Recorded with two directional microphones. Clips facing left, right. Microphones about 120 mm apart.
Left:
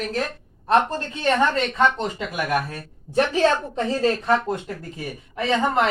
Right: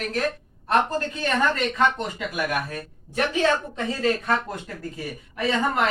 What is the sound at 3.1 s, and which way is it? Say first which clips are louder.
A woman's voice: left 3 dB; 35° left (ahead or behind).